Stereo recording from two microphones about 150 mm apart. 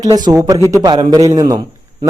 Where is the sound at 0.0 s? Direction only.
25° right (ahead or behind).